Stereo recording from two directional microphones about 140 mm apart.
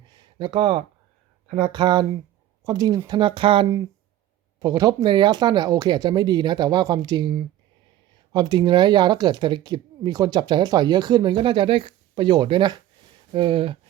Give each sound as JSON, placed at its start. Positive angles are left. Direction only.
{"t": 0.1, "sound": "a sound", "side_deg": -35}
{"t": 1.7, "sound": "speech", "side_deg": -30}
{"t": 4.6, "sound": "speech", "side_deg": -25}